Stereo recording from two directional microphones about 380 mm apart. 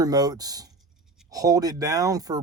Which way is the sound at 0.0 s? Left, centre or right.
Centre.